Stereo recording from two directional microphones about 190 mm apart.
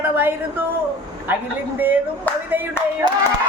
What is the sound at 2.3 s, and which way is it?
Speech, 10° left (ahead or behind).